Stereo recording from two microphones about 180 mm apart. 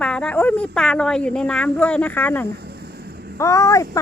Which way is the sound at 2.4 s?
65° right (ahead or behind).